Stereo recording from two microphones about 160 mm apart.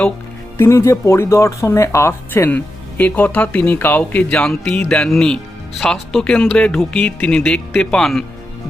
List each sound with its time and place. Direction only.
0.6 s speech: 20° left (ahead or behind); by 8.2 s 5° left (ahead or behind)